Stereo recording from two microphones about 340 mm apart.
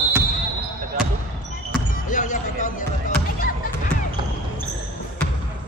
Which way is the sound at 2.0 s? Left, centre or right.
Left.